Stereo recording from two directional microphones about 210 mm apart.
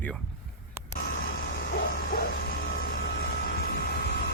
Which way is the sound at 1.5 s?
45° left (ahead or behind).